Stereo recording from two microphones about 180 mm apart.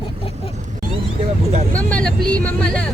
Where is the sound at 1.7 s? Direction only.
5° left (ahead or behind).